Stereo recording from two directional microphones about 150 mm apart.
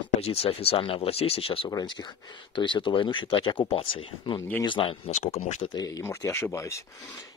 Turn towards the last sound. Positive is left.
turn(degrees=20)  # may be behind; listen again after turning